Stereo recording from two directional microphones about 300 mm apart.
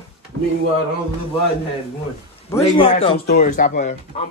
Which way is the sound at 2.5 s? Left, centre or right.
Centre.